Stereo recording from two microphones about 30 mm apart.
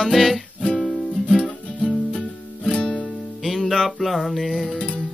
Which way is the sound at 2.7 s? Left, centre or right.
Left.